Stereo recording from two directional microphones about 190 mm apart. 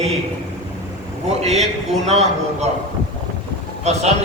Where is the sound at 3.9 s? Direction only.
35° right (ahead or behind).